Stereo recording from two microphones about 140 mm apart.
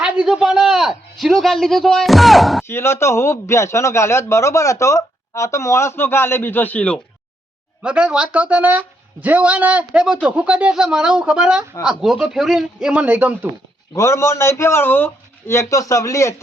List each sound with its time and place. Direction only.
0.0 s a man's voice: 5° right (ahead or behind)
2.6 s a man's voice: 15° left (ahead or behind)
7.8 s a man's voice: 5° right (ahead or behind)
13.9 s a man's voice: 20° left (ahead or behind)